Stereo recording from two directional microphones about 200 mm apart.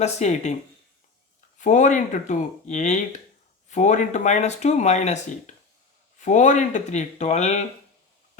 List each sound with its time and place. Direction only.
0.0 s speech: 35° left (ahead or behind)
1.5 s speech: 40° left (ahead or behind)